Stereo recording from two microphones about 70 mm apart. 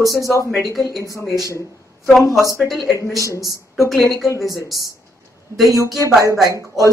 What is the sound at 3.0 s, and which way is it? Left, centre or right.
Speech, left.